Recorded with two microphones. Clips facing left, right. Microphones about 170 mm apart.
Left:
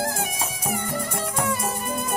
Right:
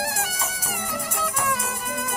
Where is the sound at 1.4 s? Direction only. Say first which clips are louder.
Left 3 dB; 30° left (ahead or behind).